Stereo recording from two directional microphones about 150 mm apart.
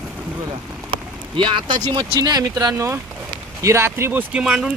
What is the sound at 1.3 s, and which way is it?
Speech, 35° right (ahead or behind).